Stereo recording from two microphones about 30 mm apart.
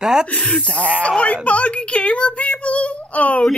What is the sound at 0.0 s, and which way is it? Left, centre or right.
Speech, right.